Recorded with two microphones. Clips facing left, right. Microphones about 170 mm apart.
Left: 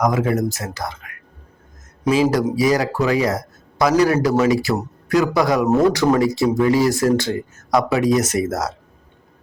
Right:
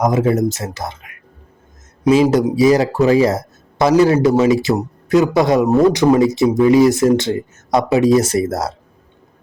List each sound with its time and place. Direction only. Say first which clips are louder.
0.0 s speech: right 4 dB; 25° right (ahead or behind)
2.3 s speech: right 5 dB; 20° right (ahead or behind)